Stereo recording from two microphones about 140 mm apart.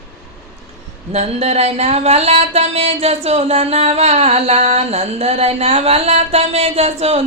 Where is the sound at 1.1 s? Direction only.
50° right (ahead or behind).